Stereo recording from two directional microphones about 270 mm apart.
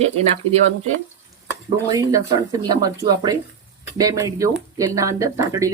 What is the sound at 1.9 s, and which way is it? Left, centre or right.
Speech, centre.